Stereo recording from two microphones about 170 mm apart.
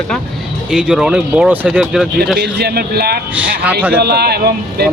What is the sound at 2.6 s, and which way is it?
Speech, 70° right (ahead or behind).